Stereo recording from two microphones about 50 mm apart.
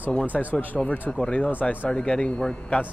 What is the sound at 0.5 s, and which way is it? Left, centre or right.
Speech, left.